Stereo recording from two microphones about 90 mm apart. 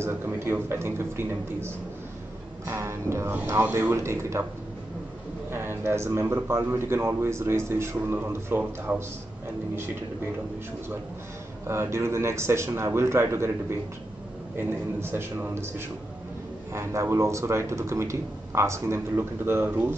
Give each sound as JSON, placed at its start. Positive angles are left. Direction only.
{"t": 0.4, "sound": "speech", "side_deg": -25}
{"t": 5.5, "sound": "speech", "side_deg": -25}
{"t": 11.6, "sound": "speech", "side_deg": -30}
{"t": 16.7, "sound": "speech", "side_deg": -30}